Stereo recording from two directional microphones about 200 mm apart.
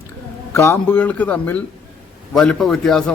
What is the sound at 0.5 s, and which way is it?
A man's voice, 10° left (ahead or behind).